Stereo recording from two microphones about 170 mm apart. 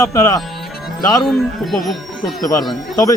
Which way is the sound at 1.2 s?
Centre (ahead or behind).